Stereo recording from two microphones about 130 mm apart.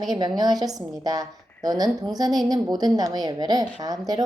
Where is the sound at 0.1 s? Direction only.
30° right (ahead or behind).